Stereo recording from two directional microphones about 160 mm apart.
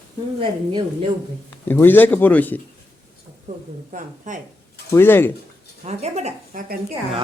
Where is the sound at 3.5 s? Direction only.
55° right (ahead or behind).